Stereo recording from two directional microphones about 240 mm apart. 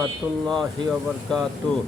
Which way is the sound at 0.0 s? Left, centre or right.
Centre.